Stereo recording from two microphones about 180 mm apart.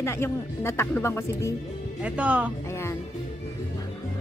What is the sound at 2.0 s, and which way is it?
Music, 5° right (ahead or behind).